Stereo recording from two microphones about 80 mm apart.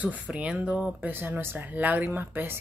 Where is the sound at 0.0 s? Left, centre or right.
Centre.